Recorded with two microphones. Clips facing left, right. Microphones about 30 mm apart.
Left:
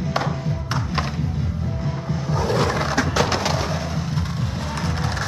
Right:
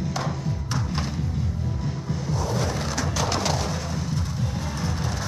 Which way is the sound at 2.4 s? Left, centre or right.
Left.